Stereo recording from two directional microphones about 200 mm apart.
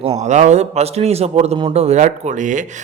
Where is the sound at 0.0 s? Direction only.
30° right (ahead or behind).